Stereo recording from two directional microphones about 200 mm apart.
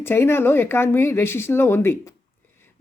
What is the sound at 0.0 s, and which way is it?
Speech, 10° left (ahead or behind).